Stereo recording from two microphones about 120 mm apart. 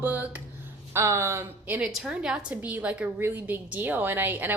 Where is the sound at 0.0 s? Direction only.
15° right (ahead or behind).